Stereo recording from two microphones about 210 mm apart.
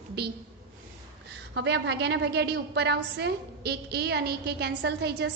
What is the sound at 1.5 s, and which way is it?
A woman's voice, 55° right (ahead or behind).